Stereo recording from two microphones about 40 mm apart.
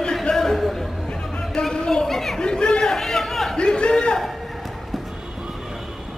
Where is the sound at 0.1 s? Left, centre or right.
Centre.